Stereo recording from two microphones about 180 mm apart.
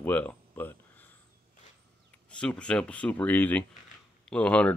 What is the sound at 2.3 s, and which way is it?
Speech, 5° left (ahead or behind).